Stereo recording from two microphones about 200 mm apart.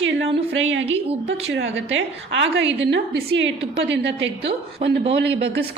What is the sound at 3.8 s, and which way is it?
A woman's voice, 60° right (ahead or behind).